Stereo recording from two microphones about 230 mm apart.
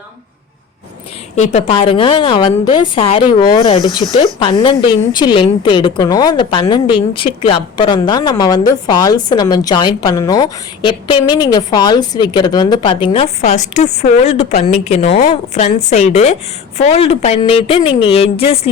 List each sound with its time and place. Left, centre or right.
1.4 s speech: left